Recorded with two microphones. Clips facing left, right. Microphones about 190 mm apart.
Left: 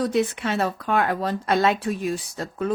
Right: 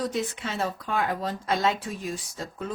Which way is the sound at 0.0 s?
65° left (ahead or behind).